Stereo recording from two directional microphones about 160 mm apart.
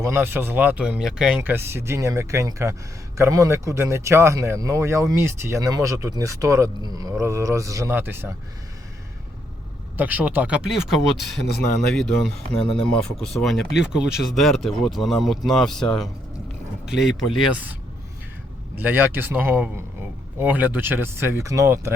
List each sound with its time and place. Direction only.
0.0 s speech: 15° right (ahead or behind)
10.0 s speech: 10° right (ahead or behind)
18.8 s speech: 10° right (ahead or behind)